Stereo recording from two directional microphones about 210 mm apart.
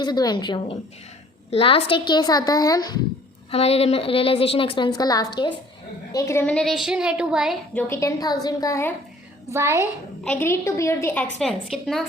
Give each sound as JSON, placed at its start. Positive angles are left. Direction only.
{"t": 0.0, "sound": "a woman's voice", "side_deg": 20}
{"t": 3.5, "sound": "a woman's voice", "side_deg": 30}
{"t": 7.7, "sound": "a woman's voice", "side_deg": 10}
{"t": 9.5, "sound": "a woman's voice", "side_deg": -15}
{"t": 9.8, "sound": "a woman's voice", "side_deg": 10}